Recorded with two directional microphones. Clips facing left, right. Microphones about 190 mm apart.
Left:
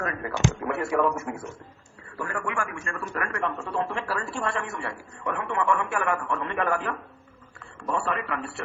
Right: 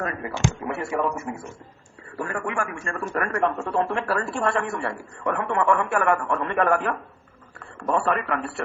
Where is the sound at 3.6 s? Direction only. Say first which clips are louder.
Right 5 dB; 55° right (ahead or behind).